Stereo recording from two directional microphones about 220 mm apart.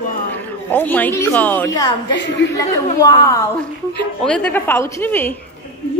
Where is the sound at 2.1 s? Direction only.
55° left (ahead or behind).